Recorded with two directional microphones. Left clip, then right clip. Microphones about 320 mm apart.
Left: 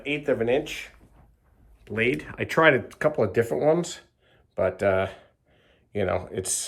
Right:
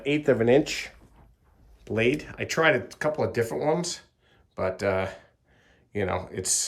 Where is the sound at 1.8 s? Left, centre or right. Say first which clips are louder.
Even; centre.